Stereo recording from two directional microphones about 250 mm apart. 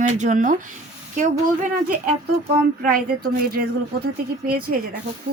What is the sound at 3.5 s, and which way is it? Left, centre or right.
A woman's voice, right.